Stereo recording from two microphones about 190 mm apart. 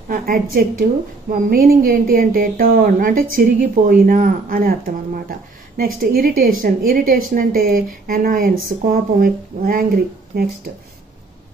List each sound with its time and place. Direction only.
0.1 s a woman's voice: 50° right (ahead or behind)